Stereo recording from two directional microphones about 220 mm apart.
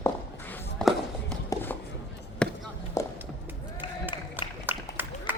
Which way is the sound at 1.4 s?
10° left (ahead or behind).